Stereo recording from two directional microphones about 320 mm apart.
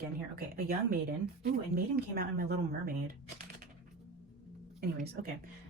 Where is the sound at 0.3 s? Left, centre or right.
Right.